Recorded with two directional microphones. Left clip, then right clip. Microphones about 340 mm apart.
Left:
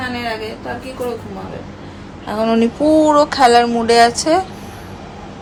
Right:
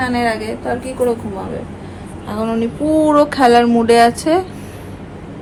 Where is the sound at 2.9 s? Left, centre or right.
Centre.